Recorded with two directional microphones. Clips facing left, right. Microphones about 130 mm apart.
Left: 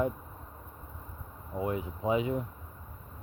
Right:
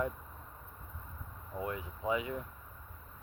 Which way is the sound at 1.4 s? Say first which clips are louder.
Left 6 dB; 20° left (ahead or behind).